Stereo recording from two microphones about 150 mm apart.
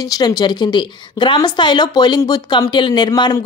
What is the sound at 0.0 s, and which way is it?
A woman's voice, 25° left (ahead or behind).